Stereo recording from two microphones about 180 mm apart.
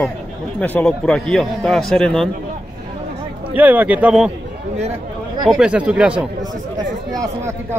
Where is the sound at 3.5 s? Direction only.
10° right (ahead or behind).